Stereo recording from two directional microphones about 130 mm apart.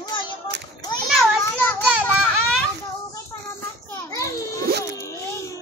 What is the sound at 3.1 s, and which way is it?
Children playing, 25° left (ahead or behind).